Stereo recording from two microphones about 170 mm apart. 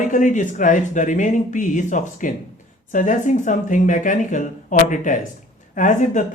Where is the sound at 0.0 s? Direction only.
50° left (ahead or behind).